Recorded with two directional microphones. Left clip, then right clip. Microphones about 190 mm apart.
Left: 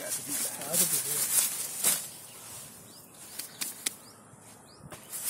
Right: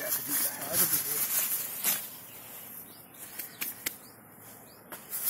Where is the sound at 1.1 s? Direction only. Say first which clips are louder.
Left 3 dB; 35° left (ahead or behind).